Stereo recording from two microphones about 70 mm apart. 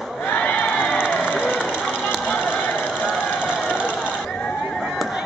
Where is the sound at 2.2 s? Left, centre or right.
Centre.